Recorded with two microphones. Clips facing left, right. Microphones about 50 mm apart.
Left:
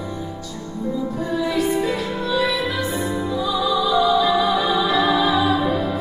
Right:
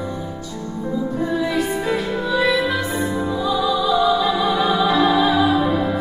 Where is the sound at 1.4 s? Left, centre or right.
Centre.